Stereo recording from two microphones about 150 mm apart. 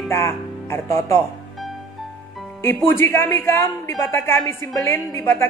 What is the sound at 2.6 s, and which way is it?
A woman's voice, 15° left (ahead or behind).